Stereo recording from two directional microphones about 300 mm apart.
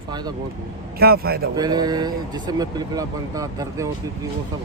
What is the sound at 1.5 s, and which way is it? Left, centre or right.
Speech, centre.